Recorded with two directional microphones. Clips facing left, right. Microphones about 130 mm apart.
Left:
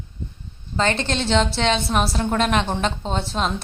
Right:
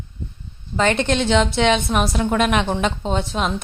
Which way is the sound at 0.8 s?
15° right (ahead or behind).